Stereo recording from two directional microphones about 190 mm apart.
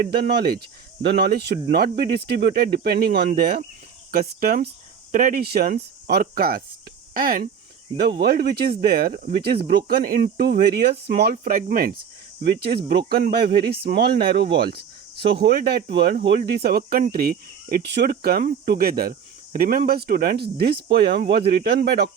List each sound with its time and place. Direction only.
0.1 s speech: 55° right (ahead or behind)